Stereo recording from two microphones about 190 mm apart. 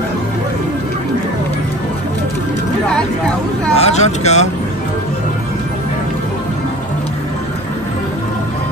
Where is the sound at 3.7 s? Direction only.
35° left (ahead or behind).